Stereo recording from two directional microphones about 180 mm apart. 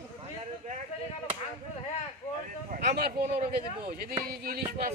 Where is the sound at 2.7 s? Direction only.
55° right (ahead or behind).